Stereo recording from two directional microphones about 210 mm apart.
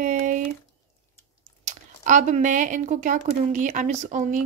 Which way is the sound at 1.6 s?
35° right (ahead or behind).